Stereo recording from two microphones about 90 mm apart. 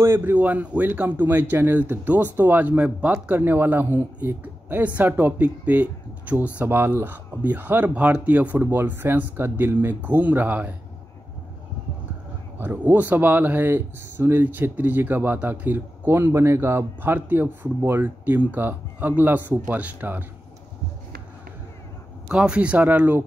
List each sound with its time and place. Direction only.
0.0 s speech: 25° right (ahead or behind)
12.5 s speech: 25° right (ahead or behind)
22.3 s speech: 10° right (ahead or behind)